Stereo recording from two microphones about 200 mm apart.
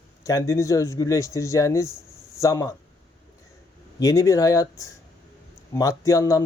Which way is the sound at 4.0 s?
15° left (ahead or behind).